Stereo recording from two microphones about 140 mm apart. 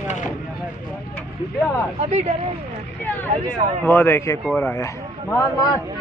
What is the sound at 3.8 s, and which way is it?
Speech, 15° left (ahead or behind).